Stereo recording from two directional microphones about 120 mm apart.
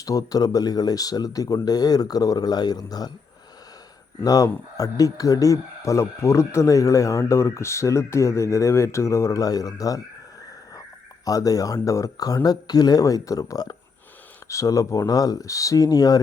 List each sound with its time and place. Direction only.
0.0 s speech: 30° left (ahead or behind)
4.2 s speech: 30° left (ahead or behind)
11.3 s speech: 30° left (ahead or behind)